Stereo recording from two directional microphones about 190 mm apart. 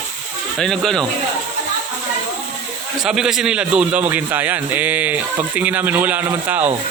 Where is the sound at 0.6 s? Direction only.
Centre (ahead or behind).